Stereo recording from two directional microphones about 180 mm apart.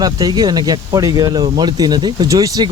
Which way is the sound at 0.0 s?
20° right (ahead or behind).